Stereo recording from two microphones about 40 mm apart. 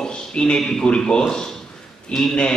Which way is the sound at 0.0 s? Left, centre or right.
Centre.